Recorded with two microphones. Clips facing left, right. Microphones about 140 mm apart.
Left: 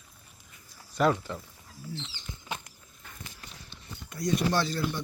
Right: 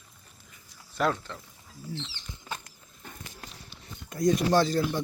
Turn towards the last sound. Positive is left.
turn(degrees=-45)  # may be behind; listen again after turning